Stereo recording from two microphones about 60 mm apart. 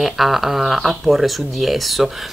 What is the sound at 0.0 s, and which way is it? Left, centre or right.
Speech, centre.